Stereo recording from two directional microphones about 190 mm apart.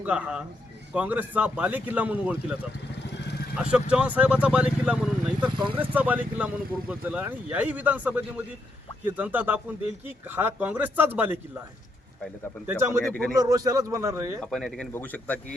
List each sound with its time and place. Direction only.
0.0 s speech: 5° right (ahead or behind)
12.6 s speech: 15° right (ahead or behind)
13.1 s speech: 5° left (ahead or behind)
13.4 s speech: 20° right (ahead or behind)
14.4 s a man's voice: centre (ahead or behind)